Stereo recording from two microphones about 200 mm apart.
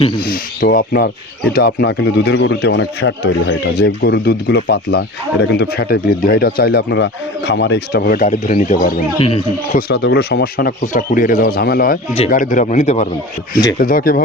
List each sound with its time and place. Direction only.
0.2 s speech: 45° left (ahead or behind)
9.1 s speech: 30° left (ahead or behind)
9.9 s speech: 55° left (ahead or behind); by 13.1 s 35° left (ahead or behind)
13.7 s speech: 45° left (ahead or behind)